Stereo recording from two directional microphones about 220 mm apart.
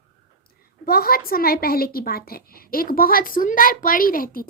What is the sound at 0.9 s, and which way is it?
A woman's voice, 45° left (ahead or behind).